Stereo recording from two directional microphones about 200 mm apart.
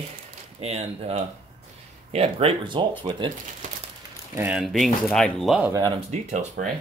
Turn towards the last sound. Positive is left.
turn(degrees=-35)  # may be behind; listen again after turning